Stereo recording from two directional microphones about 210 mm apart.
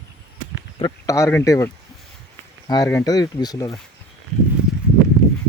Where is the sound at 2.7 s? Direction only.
15° left (ahead or behind).